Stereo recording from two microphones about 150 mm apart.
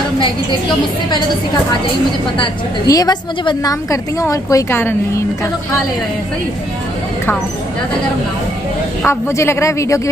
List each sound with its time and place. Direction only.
2.3 s a woman's voice: 30° left (ahead or behind)
9.0 s a woman's voice: 20° left (ahead or behind)